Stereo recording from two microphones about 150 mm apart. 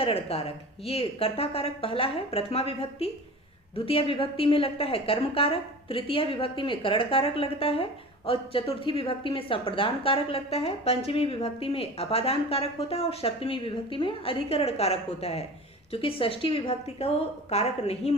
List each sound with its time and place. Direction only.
0.0 s a woman's voice: 40° left (ahead or behind)